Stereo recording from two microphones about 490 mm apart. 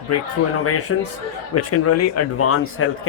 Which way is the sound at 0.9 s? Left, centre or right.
Left.